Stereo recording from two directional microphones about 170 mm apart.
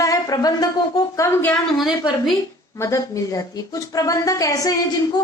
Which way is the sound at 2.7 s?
20° left (ahead or behind).